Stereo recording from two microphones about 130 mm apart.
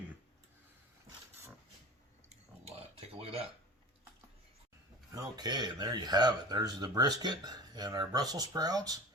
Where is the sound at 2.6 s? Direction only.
50° right (ahead or behind).